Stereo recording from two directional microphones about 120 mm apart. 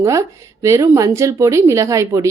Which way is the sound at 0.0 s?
25° right (ahead or behind).